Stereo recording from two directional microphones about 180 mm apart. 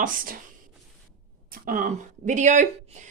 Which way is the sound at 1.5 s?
50° right (ahead or behind).